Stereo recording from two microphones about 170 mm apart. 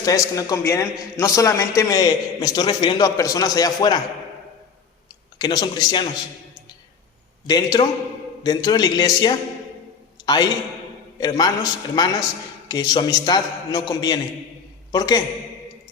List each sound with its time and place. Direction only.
0.0 s a man's voice: 20° left (ahead or behind)
5.4 s a man's voice: 25° left (ahead or behind)
7.4 s a man's voice: 25° left (ahead or behind)